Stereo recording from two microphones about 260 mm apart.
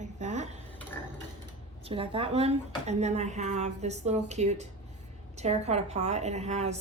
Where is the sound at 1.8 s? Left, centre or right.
Right.